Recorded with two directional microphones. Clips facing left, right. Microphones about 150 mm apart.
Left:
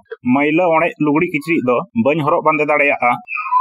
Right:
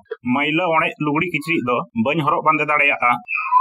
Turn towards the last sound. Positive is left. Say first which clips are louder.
# left 6 dB
turn(degrees=35)  # may be behind; listen again after turning